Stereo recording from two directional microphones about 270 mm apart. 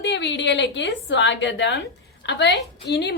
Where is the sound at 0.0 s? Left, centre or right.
Left.